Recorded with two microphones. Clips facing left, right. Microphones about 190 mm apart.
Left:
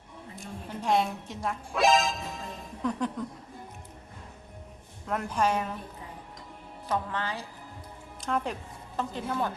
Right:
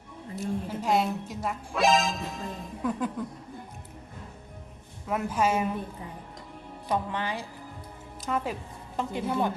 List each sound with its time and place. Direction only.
0.3 s speech: 5° right (ahead or behind)
5.0 s a woman's voice: 5° right (ahead or behind)
6.8 s a woman's voice: 15° right (ahead or behind)
8.2 s a woman's voice: 5° right (ahead or behind)